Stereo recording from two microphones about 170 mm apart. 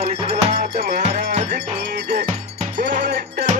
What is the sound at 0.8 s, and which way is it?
Music, 65° right (ahead or behind).